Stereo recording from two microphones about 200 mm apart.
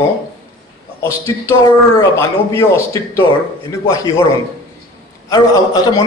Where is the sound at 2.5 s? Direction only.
15° left (ahead or behind).